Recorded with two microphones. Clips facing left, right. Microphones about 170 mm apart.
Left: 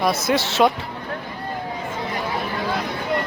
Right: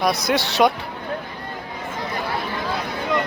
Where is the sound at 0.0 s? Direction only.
5° left (ahead or behind).